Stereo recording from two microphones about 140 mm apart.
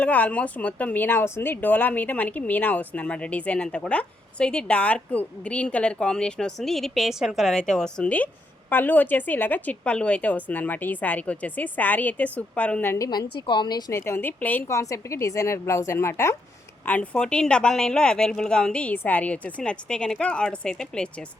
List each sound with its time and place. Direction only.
0.0 s a woman's voice: 10° left (ahead or behind)
13.1 s a woman's voice: 35° left (ahead or behind); by 21.1 s 5° left (ahead or behind)